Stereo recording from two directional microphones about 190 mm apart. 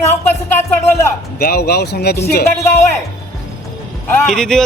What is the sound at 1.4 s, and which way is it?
Speech, 55° left (ahead or behind).